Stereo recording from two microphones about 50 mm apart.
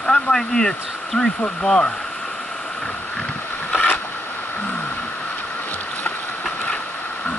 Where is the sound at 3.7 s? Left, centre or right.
Left.